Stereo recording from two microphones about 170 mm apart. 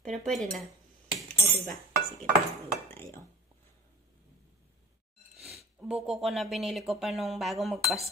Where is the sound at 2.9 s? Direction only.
15° left (ahead or behind).